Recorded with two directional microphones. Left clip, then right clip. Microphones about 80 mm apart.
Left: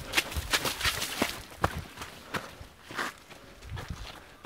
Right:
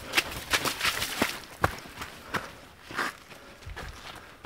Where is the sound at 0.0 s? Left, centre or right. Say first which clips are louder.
Right 2 dB; centre.